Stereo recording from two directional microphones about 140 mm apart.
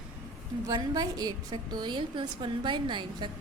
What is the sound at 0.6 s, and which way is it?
A woman's voice, 30° right (ahead or behind).